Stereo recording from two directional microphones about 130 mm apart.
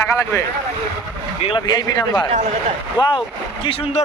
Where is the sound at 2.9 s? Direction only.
40° left (ahead or behind).